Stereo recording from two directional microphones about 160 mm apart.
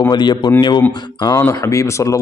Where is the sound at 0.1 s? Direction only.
25° left (ahead or behind).